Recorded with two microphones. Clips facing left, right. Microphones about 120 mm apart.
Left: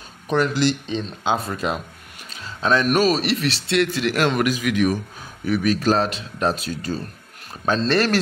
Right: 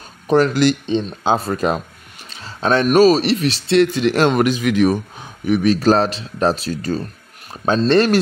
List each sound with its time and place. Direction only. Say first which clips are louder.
0.5 s speech: right 5 dB; 55° right (ahead or behind)
0.8 s speech: right 5 dB; 30° right (ahead or behind)
1.5 s speech: right 6 dB; 45° right (ahead or behind)
2.2 s a sound: right 3 dB; 30° right (ahead or behind)
3.0 s speech: right 7 dB; 30° right (ahead or behind)
7.9 s speech: right 6 dB; 20° right (ahead or behind)